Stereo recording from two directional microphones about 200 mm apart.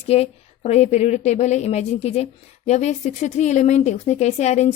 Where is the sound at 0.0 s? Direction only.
30° left (ahead or behind).